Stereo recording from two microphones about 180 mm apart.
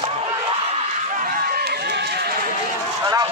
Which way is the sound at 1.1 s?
55° right (ahead or behind).